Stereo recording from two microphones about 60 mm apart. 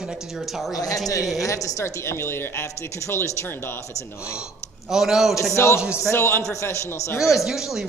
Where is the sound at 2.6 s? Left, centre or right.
Left.